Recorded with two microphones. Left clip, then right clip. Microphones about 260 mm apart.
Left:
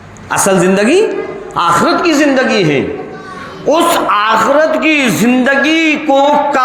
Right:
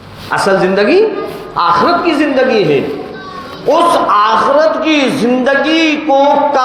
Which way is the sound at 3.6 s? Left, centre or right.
Left.